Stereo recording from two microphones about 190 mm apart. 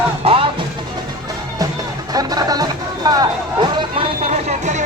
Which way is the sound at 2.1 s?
20° right (ahead or behind).